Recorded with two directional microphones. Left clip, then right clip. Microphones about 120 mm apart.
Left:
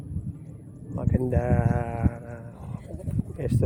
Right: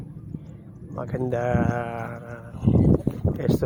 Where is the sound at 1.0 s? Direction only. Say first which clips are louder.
Right 2 dB; 20° left (ahead or behind).